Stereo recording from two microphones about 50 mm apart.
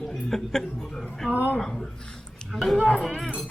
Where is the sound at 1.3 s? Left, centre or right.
Right.